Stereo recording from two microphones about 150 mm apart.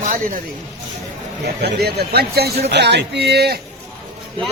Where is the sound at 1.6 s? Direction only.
90° right.